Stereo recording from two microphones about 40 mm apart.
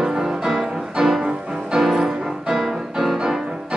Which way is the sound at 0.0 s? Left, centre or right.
Centre.